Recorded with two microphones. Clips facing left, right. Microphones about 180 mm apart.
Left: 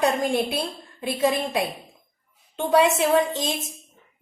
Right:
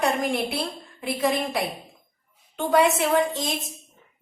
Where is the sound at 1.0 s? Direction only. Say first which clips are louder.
Left 1 dB; 25° left (ahead or behind).